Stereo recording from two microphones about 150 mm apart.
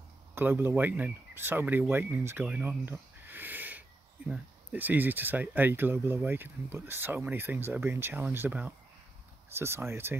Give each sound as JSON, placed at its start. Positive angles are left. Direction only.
{"t": 0.3, "sound": "speech", "side_deg": -15}